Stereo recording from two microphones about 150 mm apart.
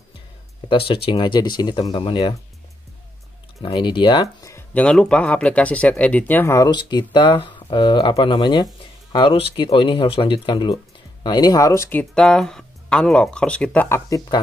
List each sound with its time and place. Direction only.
0.7 s speech: 35° left (ahead or behind)
3.6 s speech: 35° left (ahead or behind)